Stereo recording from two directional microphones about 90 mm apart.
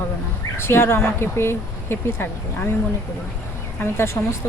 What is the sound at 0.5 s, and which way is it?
Speech, 30° left (ahead or behind).